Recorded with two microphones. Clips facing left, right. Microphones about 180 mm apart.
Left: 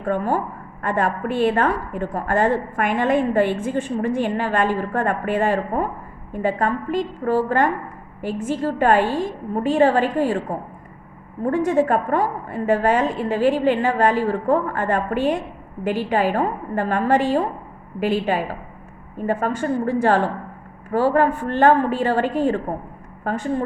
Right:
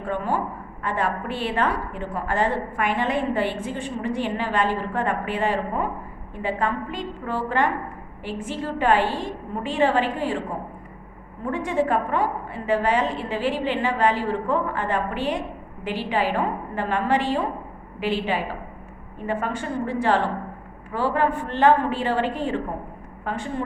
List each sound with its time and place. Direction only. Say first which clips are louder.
0.0 s a woman's voice: left 4 dB; 45° left (ahead or behind)
11.4 s a woman's voice: left 5 dB; 45° left (ahead or behind)